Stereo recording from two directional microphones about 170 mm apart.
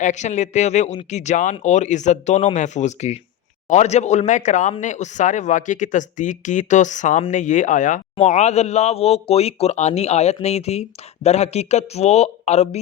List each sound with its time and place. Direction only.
0.0 s speech: 45° left (ahead or behind)